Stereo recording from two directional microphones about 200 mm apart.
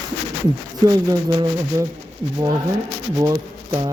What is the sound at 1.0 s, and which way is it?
Speech, 20° right (ahead or behind).